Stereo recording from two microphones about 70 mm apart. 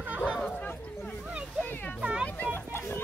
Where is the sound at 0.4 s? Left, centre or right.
Centre.